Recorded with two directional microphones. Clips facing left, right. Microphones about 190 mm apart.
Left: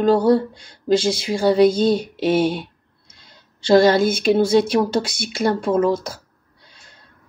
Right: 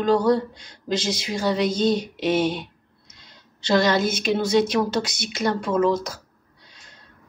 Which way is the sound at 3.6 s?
30° left (ahead or behind).